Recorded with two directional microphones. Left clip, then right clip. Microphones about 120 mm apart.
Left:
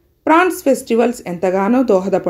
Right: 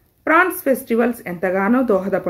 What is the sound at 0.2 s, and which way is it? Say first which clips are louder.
Speech: left 3 dB; 35° left (ahead or behind).